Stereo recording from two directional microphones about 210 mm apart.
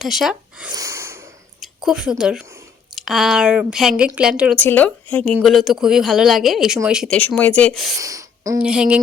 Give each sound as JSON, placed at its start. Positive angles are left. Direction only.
{"t": 0.0, "sound": "speech", "side_deg": 0}
{"t": 0.7, "sound": "snort", "side_deg": -15}
{"t": 1.6, "sound": "a woman's voice", "side_deg": 0}
{"t": 4.5, "sound": "a woman's voice", "side_deg": 5}
{"t": 7.9, "sound": "speech", "side_deg": -15}
{"t": 8.5, "sound": "a woman's voice", "side_deg": -5}